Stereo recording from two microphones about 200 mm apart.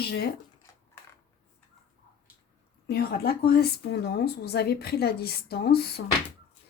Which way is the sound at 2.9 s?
50° left (ahead or behind).